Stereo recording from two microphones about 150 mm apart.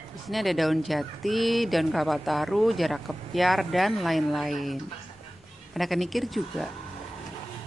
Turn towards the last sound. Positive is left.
turn(degrees=0)  # may be behind; listen again after turning